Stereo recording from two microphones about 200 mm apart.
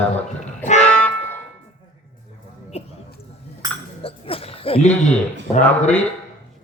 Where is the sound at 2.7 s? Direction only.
30° left (ahead or behind).